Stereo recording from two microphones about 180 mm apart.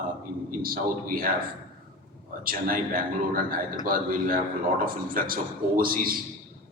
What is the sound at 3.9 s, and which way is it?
Speech, 50° right (ahead or behind).